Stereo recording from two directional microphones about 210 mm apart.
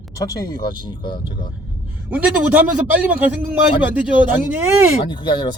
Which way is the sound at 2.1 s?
10° right (ahead or behind).